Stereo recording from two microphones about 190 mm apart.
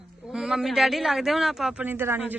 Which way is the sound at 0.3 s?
5° right (ahead or behind).